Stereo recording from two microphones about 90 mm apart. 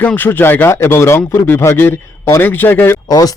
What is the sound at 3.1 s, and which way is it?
Speech, 45° left (ahead or behind).